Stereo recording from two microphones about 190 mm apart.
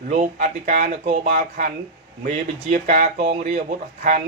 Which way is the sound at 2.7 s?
40° right (ahead or behind).